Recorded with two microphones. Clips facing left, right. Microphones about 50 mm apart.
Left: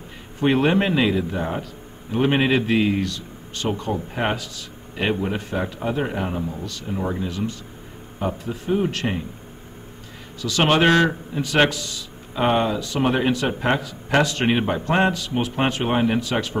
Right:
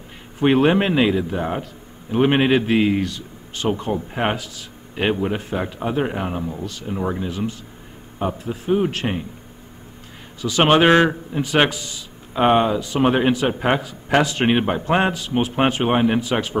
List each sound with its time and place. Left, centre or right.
0.4 s a man's voice: centre
2.1 s a man's voice: right
10.4 s a man's voice: right